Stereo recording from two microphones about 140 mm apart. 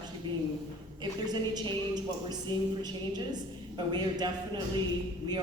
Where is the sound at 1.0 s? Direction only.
30° right (ahead or behind).